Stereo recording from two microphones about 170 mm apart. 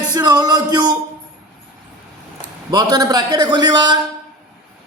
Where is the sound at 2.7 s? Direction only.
20° right (ahead or behind).